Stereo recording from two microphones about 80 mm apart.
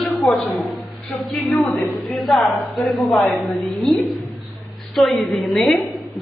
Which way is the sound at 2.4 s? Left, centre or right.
Left.